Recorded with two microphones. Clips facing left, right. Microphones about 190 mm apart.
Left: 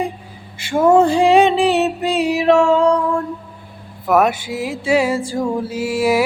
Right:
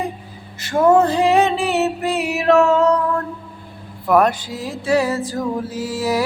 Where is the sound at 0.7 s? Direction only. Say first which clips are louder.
Left 2 dB; 10° left (ahead or behind).